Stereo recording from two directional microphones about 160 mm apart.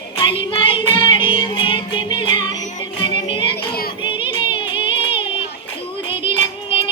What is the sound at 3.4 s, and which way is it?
Child singing, 80° left.